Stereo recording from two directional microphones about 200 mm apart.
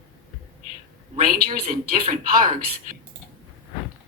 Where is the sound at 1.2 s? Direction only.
45° right (ahead or behind).